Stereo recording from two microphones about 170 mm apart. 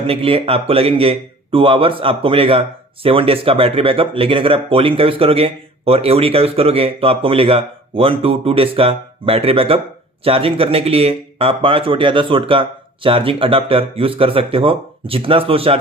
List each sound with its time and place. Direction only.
0.1 s a man's voice: 35° right (ahead or behind)